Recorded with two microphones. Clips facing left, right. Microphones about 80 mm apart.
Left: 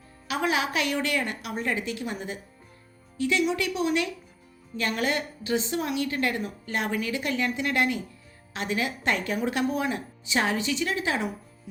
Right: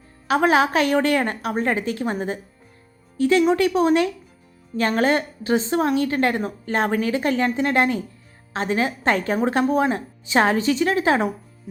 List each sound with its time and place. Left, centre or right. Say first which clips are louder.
0.3 s a woman's voice: right 9 dB; right